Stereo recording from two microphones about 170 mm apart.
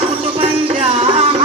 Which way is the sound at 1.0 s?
35° right (ahead or behind).